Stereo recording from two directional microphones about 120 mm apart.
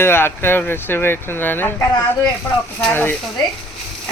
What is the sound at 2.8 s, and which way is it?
Speech, 15° left (ahead or behind).